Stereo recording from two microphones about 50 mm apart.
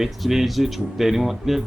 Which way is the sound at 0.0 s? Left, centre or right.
Centre.